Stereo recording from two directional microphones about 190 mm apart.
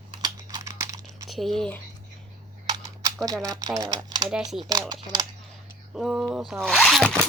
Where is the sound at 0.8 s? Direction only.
20° right (ahead or behind).